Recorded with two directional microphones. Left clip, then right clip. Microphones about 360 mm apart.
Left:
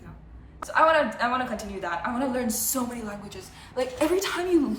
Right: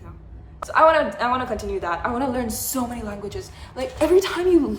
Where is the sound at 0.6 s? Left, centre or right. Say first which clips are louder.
Right 4 dB; centre.